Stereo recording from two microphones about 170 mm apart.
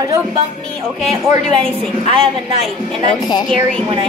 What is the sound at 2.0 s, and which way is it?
Speech, 35° right (ahead or behind).